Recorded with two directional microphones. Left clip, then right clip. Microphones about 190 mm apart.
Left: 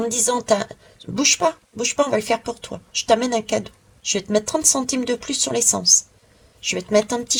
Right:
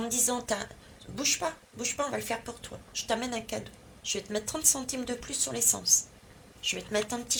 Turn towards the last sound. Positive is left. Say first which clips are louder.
# left 12 dB
turn(degrees=35)  # may be behind; listen again after turning